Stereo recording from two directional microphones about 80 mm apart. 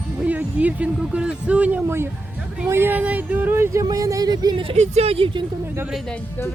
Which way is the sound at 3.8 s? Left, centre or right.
Right.